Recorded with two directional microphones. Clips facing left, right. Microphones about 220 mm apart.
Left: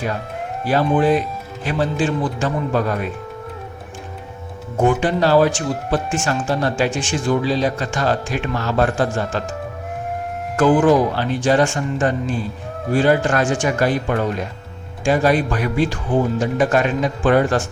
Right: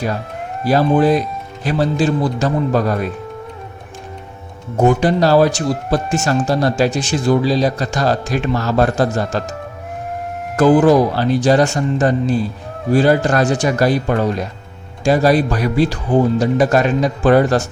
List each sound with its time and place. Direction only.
0.6 s speech: 40° right (ahead or behind)
4.8 s speech: 40° right (ahead or behind)
10.6 s speech: 40° right (ahead or behind)